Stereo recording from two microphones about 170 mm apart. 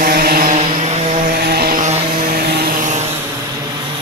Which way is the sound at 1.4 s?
65° right (ahead or behind).